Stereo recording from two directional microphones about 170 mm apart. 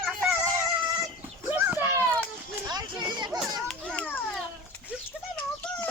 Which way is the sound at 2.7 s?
25° right (ahead or behind).